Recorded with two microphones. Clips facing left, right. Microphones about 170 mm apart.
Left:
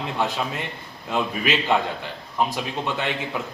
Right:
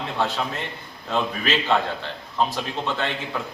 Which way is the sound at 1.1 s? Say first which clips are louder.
Even; 15° left (ahead or behind).